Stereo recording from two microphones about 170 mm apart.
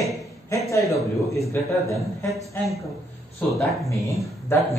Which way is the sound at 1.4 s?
15° left (ahead or behind).